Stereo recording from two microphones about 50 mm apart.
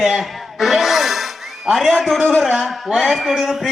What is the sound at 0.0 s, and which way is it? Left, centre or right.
Music, centre.